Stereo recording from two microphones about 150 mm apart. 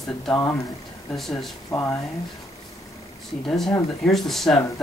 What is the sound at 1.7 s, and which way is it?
Speech, 20° left (ahead or behind).